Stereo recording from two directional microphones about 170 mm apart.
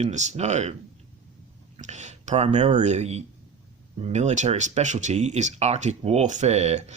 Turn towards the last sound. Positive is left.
turn(degrees=-40)  # may be behind; listen again after turning